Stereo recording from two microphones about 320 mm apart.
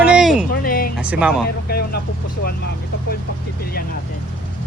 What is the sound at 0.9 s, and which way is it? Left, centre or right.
Speech, centre.